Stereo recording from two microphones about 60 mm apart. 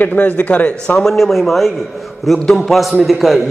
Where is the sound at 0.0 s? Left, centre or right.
Left.